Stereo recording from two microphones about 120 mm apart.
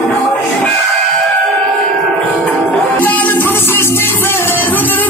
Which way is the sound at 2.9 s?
15° left (ahead or behind).